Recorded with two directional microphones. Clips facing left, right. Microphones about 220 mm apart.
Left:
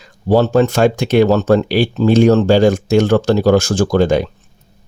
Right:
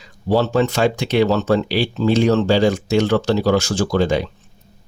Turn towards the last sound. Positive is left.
turn(degrees=50)  # may be behind; listen again after turning